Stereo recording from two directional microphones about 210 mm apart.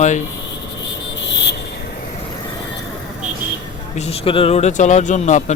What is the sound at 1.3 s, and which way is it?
Cricket, 55° left (ahead or behind).